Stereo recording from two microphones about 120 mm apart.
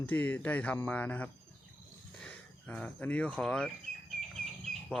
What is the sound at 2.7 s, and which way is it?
Speech, 10° left (ahead or behind).